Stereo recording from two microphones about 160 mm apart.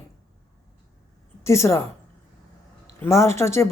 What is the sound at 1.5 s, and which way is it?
Speech, 15° left (ahead or behind).